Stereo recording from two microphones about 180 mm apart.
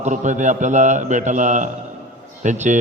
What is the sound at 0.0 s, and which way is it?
A man's voice, 45° right (ahead or behind).